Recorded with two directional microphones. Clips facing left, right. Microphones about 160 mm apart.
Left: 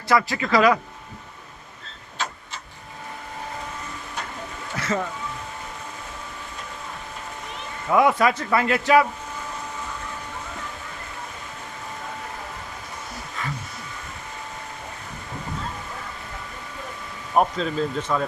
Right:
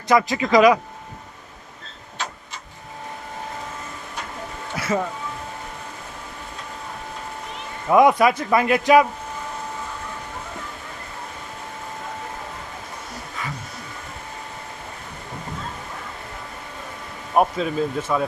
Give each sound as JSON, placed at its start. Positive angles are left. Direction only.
{"t": 0.1, "sound": "a man's voice", "side_deg": -20}
{"t": 4.8, "sound": "speech", "side_deg": -10}
{"t": 7.9, "sound": "a man's voice", "side_deg": -15}
{"t": 17.3, "sound": "a man's voice", "side_deg": -10}